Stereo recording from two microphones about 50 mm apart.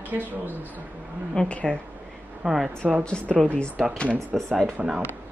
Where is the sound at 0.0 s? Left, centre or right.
Right.